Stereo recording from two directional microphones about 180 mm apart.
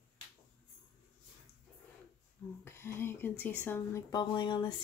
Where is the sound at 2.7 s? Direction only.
15° left (ahead or behind).